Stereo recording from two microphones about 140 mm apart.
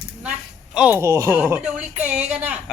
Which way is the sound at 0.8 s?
15° right (ahead or behind).